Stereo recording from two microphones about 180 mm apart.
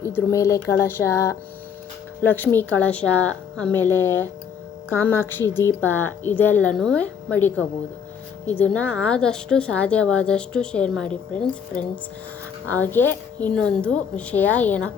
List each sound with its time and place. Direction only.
0.0 s a woman's voice: 15° left (ahead or behind)